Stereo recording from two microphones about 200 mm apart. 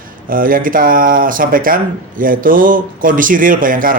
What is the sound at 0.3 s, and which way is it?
Speech, 45° right (ahead or behind).